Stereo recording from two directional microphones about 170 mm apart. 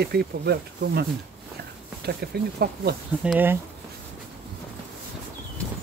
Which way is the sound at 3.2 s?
10° right (ahead or behind).